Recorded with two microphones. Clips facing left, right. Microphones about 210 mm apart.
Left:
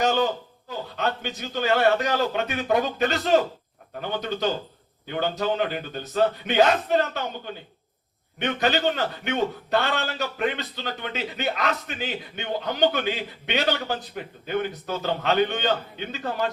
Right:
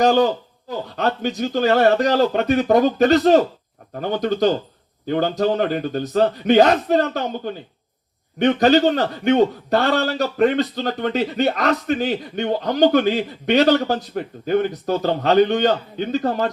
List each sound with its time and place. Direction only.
0.0 s a man's voice: 35° right (ahead or behind)